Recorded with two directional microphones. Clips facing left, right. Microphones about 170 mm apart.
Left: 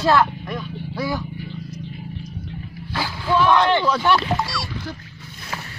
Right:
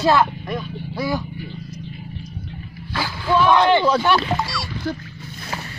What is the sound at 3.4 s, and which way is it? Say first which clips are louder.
Speech: right 2 dB; 10° right (ahead or behind).